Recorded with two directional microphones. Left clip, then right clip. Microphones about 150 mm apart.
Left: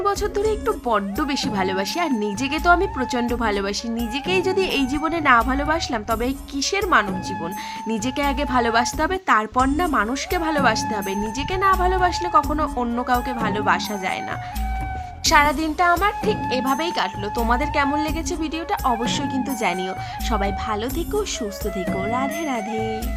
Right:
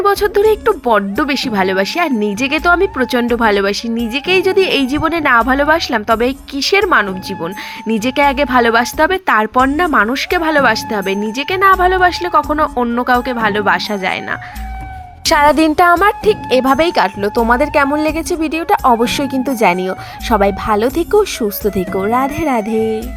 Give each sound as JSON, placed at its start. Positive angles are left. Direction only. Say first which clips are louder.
{"t": 0.0, "sound": "speech", "louder": "right 10 dB", "side_deg": -35}
{"t": 15.2, "sound": "speech", "louder": "right 7 dB", "side_deg": -60}
{"t": 21.6, "sound": "speech", "louder": "right 10 dB", "side_deg": 0}
{"t": 22.0, "sound": "speech", "louder": "right 10 dB", "side_deg": -45}
{"t": 22.7, "sound": "speech", "louder": "right 9 dB", "side_deg": 0}